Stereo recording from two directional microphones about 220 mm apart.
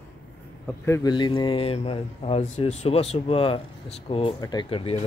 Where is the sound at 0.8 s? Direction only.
15° left (ahead or behind).